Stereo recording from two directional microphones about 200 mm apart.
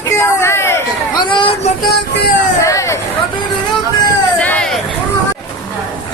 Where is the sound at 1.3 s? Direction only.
25° left (ahead or behind).